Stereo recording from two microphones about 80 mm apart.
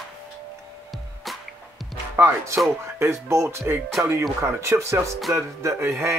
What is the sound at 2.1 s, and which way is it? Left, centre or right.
Speech, right.